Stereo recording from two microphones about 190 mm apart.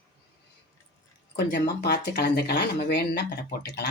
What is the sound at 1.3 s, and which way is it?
Speech, 60° left (ahead or behind).